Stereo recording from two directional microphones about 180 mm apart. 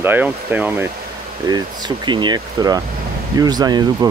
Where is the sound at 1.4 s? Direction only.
20° right (ahead or behind).